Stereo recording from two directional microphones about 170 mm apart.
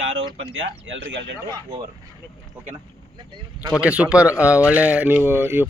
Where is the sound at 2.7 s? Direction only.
25° right (ahead or behind).